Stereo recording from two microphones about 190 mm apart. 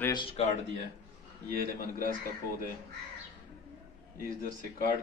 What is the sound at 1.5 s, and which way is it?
Speech, 50° right (ahead or behind).